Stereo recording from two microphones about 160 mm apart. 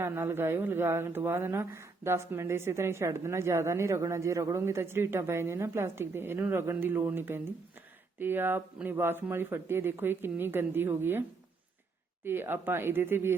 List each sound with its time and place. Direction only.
0.0 s a woman's voice: 15° right (ahead or behind)
12.2 s a woman's voice: 15° right (ahead or behind)